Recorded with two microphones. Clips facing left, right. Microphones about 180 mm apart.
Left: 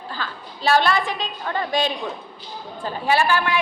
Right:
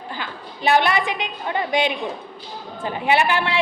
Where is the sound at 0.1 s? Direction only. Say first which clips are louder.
Even; 20° right (ahead or behind).